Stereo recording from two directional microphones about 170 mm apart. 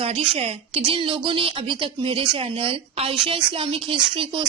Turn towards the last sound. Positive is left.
turn(degrees=-30)  # may be behind; listen again after turning